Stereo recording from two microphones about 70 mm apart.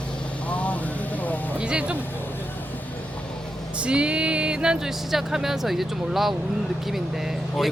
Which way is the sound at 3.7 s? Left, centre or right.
Centre.